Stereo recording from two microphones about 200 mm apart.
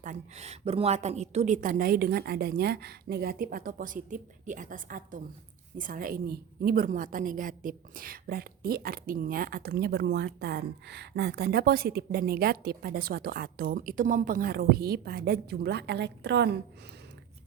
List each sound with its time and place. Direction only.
0.0 s a woman's voice: 35° right (ahead or behind); by 16.5 s 60° right (ahead or behind)